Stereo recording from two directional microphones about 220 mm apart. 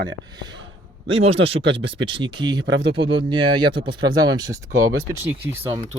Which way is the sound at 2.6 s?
50° right (ahead or behind).